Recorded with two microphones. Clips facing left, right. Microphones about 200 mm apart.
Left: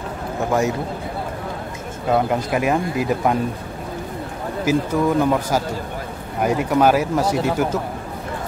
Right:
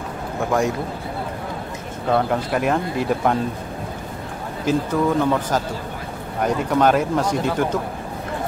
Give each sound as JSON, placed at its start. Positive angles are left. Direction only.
{"t": 0.5, "sound": "a man's voice", "side_deg": 5}
{"t": 2.0, "sound": "speech", "side_deg": 10}
{"t": 4.6, "sound": "speech", "side_deg": 10}